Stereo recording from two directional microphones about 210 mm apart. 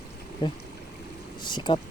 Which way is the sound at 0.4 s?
25° left (ahead or behind).